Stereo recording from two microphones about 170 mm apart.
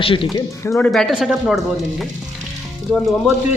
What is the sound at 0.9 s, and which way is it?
Speech, centre (ahead or behind).